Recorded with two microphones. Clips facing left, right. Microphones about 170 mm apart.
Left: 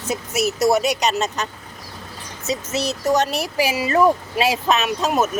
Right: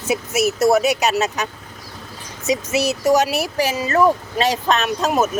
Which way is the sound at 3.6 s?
10° left (ahead or behind).